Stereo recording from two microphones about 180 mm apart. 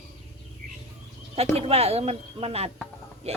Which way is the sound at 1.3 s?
35° right (ahead or behind).